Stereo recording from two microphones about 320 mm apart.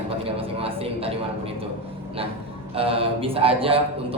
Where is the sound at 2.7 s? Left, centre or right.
Centre.